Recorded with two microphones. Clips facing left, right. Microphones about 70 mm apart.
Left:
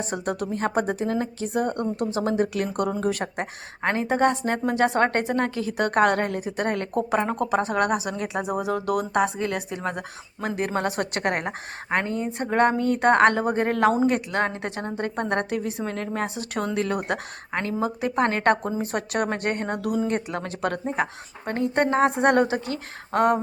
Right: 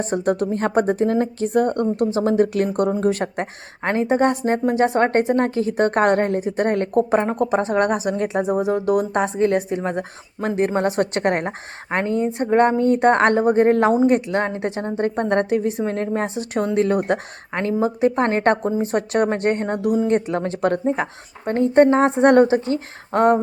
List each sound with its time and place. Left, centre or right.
0.0 s speech: right
2.0 s speech: right
19.8 s speech: centre
20.1 s speech: right